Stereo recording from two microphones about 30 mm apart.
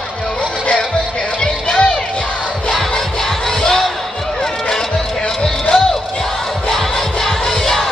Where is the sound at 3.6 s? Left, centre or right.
Centre.